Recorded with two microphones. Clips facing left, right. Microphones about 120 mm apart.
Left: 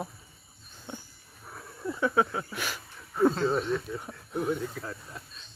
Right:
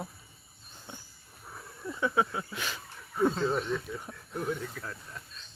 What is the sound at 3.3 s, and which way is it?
Speech, centre (ahead or behind).